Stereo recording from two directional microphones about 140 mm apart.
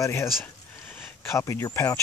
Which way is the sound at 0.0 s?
20° left (ahead or behind).